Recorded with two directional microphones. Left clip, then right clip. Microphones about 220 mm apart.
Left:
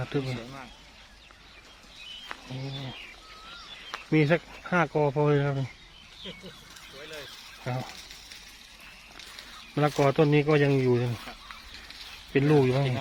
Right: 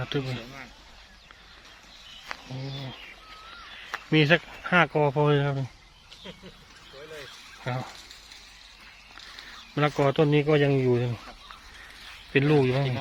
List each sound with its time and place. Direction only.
0.0 s speech: 5° left (ahead or behind)
2.3 s a sound: 30° right (ahead or behind)
4.1 s speech: 5° right (ahead or behind)
7.6 s speech: 5° right (ahead or behind)
9.7 s speech: centre (ahead or behind)
12.3 s speech: centre (ahead or behind)